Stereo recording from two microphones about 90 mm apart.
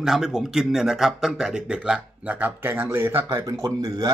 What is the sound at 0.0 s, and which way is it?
Speech, 5° right (ahead or behind).